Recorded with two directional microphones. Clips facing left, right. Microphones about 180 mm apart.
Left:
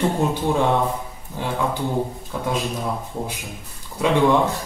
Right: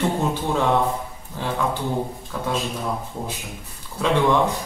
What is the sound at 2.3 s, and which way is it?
Speech, 20° left (ahead or behind).